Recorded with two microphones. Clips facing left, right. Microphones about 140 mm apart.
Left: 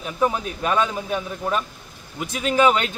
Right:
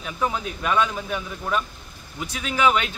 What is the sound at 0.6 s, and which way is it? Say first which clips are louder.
Speech: even; 35° left (ahead or behind).